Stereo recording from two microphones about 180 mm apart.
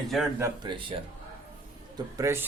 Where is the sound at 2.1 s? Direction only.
15° right (ahead or behind).